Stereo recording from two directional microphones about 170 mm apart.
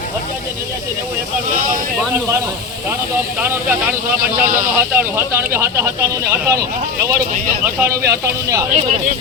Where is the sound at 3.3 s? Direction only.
15° right (ahead or behind).